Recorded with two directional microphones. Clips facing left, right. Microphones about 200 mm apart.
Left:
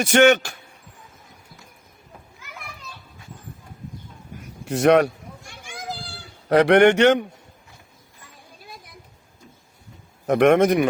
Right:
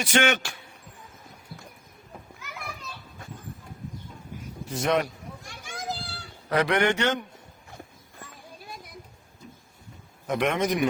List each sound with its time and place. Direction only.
0.0 s a man's voice: 55° left (ahead or behind)
4.6 s a man's voice: 70° left (ahead or behind)
6.5 s a man's voice: 65° left (ahead or behind)
10.2 s a man's voice: 65° left (ahead or behind)